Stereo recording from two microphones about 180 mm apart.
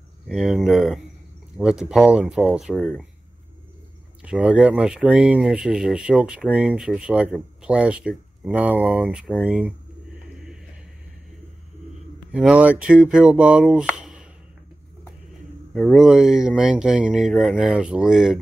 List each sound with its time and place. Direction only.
0.3 s speech: centre (ahead or behind)
2.7 s speech: 10° left (ahead or behind)
4.2 s speech: 5° right (ahead or behind)
12.3 s speech: 5° right (ahead or behind)
15.7 s speech: 5° left (ahead or behind)